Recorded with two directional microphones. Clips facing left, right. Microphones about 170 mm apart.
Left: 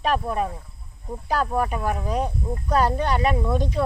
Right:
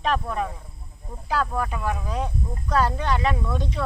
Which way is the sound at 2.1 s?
35° left (ahead or behind).